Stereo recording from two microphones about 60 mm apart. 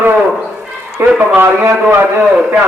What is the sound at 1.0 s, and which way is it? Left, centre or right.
Speech, right.